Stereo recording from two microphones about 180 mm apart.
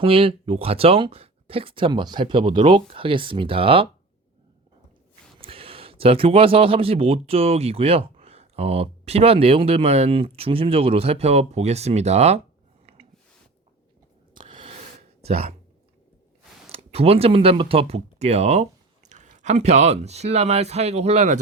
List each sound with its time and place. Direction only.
0.0 s speech: 30° right (ahead or behind)
5.4 s a man's voice: 30° right (ahead or behind)
14.3 s a sound: 30° right (ahead or behind)
16.7 s speech: 35° right (ahead or behind)